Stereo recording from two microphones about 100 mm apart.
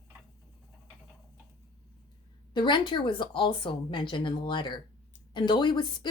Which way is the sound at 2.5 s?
50° left (ahead or behind).